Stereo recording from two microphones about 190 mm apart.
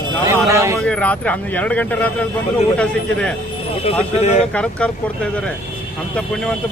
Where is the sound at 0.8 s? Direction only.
5° left (ahead or behind).